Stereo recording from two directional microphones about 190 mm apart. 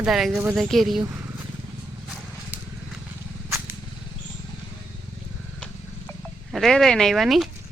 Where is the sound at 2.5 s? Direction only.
10° right (ahead or behind).